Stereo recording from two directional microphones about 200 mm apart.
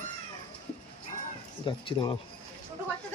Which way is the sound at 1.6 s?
25° left (ahead or behind).